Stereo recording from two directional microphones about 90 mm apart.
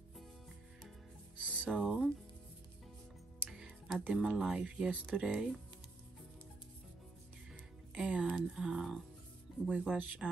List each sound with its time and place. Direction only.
1.3 s music: 15° right (ahead or behind)
1.7 s music: 5° right (ahead or behind)
3.4 s music: 5° right (ahead or behind)
4.1 s speech: 5° right (ahead or behind)
7.9 s music: 10° right (ahead or behind)
8.3 s speech: 5° right (ahead or behind)